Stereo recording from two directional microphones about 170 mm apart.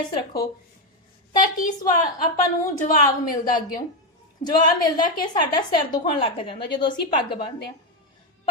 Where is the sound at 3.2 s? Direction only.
55° left (ahead or behind).